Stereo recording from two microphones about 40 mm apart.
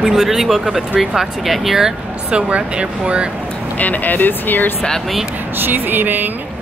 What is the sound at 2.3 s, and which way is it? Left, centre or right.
Speech, right.